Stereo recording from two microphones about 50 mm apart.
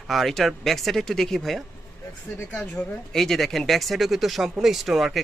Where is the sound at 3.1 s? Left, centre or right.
Centre.